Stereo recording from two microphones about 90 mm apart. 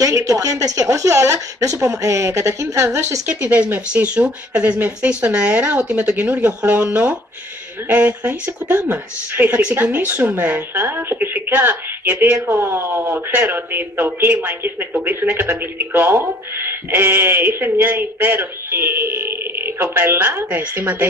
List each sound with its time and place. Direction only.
0.0 s speech: 40° right (ahead or behind)
3.3 s speech: 15° right (ahead or behind)